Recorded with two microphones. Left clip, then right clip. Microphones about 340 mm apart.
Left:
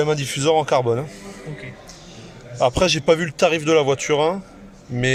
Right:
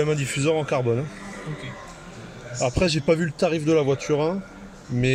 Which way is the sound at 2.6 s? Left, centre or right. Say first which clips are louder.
Left 6 dB; left.